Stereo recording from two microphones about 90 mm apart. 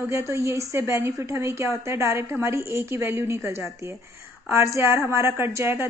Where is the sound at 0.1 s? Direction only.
35° right (ahead or behind).